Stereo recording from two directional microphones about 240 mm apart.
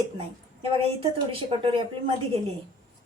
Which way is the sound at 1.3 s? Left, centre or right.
Right.